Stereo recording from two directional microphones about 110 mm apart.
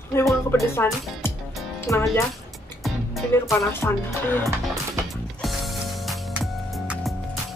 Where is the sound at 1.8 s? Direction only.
20° left (ahead or behind).